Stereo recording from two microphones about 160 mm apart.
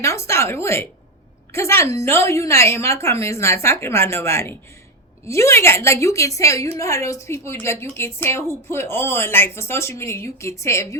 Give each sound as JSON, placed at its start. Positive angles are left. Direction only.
{"t": 0.0, "sound": "a woman's voice", "side_deg": 20}